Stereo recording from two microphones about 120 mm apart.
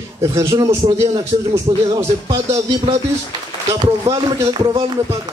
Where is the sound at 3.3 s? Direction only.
35° right (ahead or behind).